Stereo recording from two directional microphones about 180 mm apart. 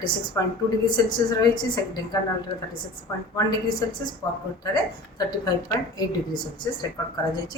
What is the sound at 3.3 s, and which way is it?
A woman's voice, 25° left (ahead or behind).